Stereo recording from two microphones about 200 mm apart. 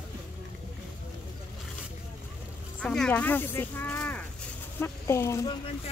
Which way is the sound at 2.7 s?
5° left (ahead or behind).